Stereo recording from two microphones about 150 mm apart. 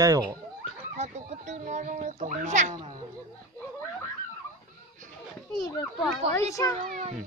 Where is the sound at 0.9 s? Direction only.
50° right (ahead or behind).